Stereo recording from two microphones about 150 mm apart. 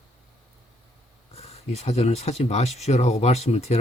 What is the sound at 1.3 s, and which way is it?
Speech, 45° left (ahead or behind).